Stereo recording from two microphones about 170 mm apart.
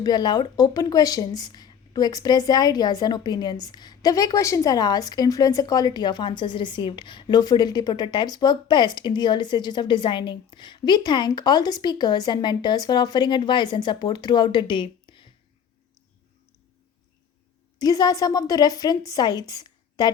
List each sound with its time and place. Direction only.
0.0 s speech: 25° left (ahead or behind)
17.7 s speech: 20° left (ahead or behind)